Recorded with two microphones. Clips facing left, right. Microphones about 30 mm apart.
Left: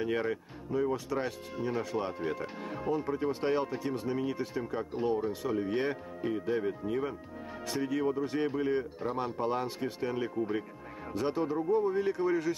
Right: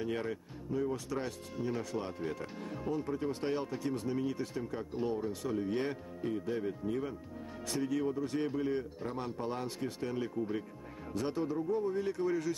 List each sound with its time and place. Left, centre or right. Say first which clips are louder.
0.0 s speech: left 5 dB; centre